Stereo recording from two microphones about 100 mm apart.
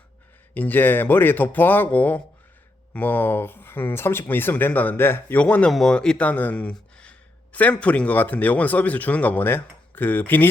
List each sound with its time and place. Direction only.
0.5 s speech: 15° left (ahead or behind)